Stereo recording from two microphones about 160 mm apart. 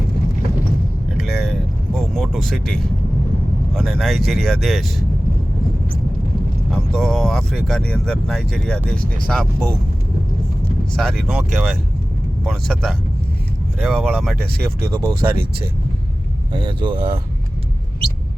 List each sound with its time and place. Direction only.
1.1 s vehicle: centre (ahead or behind)
3.8 s speech: centre (ahead or behind)
6.9 s speech: centre (ahead or behind)
10.9 s speech: centre (ahead or behind)
15.2 s speech: 15° right (ahead or behind)
16.5 s speech: 30° right (ahead or behind)